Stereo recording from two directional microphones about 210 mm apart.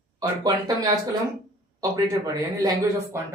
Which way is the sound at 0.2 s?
20° right (ahead or behind).